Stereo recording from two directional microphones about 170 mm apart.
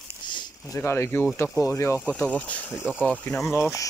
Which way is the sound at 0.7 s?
15° left (ahead or behind).